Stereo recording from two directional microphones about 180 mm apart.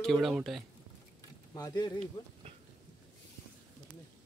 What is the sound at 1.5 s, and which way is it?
Speech, 20° left (ahead or behind).